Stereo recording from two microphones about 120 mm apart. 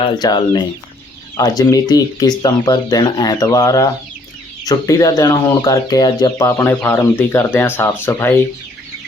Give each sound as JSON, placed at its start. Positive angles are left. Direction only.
{"t": 0.0, "sound": "speech", "side_deg": 40}
{"t": 6.4, "sound": "speech", "side_deg": 20}